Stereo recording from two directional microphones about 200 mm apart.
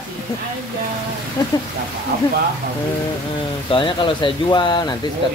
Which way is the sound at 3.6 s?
25° left (ahead or behind).